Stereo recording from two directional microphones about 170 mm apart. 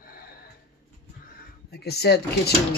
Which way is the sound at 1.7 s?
70° left (ahead or behind).